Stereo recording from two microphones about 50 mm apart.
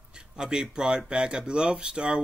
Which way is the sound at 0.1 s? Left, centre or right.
Centre.